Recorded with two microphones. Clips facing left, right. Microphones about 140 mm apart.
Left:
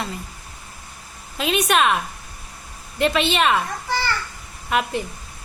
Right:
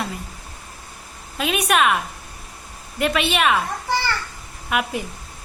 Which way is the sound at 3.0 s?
5° right (ahead or behind).